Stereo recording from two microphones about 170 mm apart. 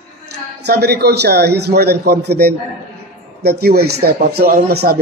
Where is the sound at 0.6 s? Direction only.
70° right (ahead or behind).